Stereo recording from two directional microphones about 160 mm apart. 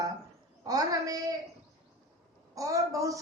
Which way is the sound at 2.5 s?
20° right (ahead or behind).